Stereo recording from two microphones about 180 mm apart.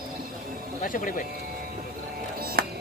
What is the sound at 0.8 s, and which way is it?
Speech, 50° left (ahead or behind).